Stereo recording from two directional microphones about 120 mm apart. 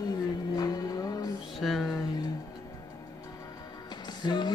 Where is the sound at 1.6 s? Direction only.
Centre (ahead or behind).